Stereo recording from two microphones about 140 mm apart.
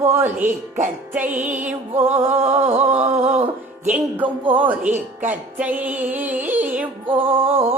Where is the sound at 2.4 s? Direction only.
50° right (ahead or behind).